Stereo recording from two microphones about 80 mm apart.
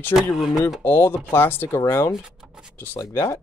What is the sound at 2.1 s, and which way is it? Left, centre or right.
Speech, centre.